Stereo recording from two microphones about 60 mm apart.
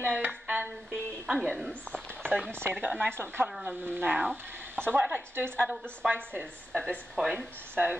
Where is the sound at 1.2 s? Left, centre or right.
Centre.